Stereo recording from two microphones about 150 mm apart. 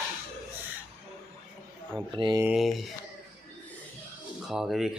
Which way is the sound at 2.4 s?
Centre (ahead or behind).